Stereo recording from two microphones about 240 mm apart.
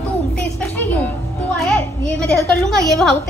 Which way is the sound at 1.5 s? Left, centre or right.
Centre.